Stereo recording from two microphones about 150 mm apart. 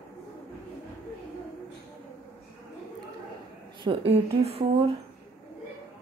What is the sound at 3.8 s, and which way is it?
Speech, 35° right (ahead or behind).